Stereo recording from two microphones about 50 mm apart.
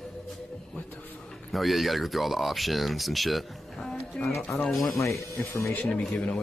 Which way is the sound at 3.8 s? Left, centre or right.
Centre.